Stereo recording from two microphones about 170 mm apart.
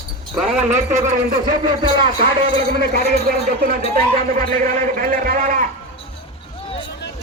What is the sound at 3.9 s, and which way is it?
Speech, 50° right (ahead or behind).